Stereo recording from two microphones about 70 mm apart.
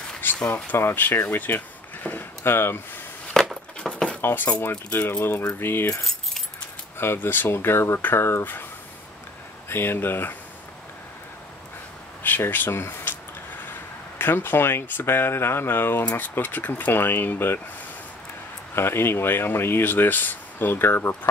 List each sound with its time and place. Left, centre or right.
0.5 s speech: left
2.0 s a sound: left
3.3 s a sound: centre
4.2 s speech: left
5.5 s speech: left
7.0 s speech: left
9.7 s speech: left
12.2 s a sound: left
14.1 s speech: left
18.8 s speech: left